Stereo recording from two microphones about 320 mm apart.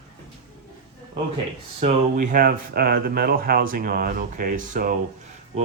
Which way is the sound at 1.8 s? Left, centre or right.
Right.